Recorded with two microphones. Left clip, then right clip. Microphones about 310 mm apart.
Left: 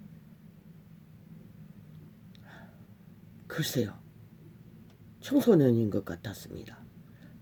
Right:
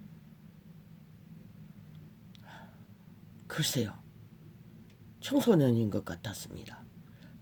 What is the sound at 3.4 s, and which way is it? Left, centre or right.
Speech, centre.